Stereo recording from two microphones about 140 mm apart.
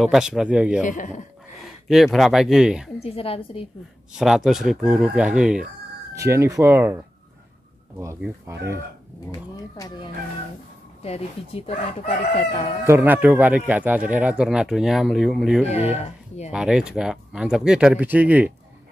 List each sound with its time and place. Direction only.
0.0 s speech: 5° right (ahead or behind)
0.8 s speech: 65° left (ahead or behind)
1.9 s speech: centre (ahead or behind)
3.0 s speech: 45° left (ahead or behind)
4.1 s speech: 5° right (ahead or behind)
6.1 s speech: 20° right (ahead or behind)
8.5 s speech: 20° right (ahead or behind)
9.3 s speech: 30° left (ahead or behind)
11.0 s speech: 45° left (ahead or behind)
12.8 s speech: 15° right (ahead or behind)
15.6 s speech: 50° left (ahead or behind)
16.5 s speech: 5° right (ahead or behind)